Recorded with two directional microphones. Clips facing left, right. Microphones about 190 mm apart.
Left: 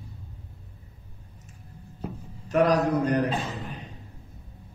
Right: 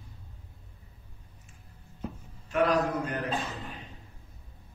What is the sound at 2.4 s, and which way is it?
Speech, 40° left (ahead or behind).